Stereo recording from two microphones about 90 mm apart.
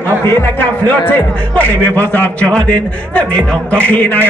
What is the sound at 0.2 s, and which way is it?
A man's voice, 25° left (ahead or behind).